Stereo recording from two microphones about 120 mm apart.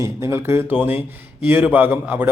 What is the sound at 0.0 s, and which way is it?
Speech, 20° right (ahead or behind).